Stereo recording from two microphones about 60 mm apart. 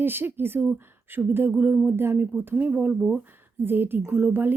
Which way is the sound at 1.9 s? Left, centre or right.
Right.